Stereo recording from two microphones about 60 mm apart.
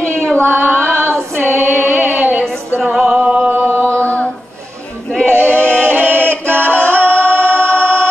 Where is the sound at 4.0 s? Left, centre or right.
Left.